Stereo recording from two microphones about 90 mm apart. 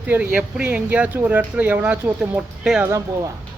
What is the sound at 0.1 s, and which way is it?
Speech, 15° right (ahead or behind).